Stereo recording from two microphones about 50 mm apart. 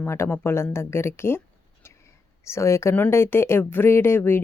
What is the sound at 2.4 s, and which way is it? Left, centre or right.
Speech, left.